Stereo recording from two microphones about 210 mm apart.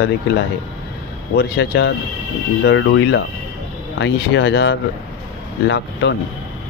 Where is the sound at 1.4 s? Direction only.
55° left (ahead or behind).